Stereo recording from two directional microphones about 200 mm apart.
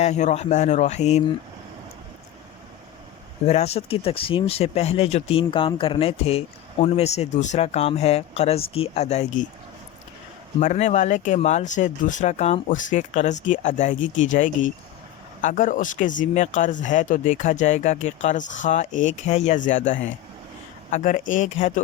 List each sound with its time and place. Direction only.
0.0 s speech: 35° left (ahead or behind)
3.4 s speech: 30° left (ahead or behind)
10.6 s speech: 35° left (ahead or behind)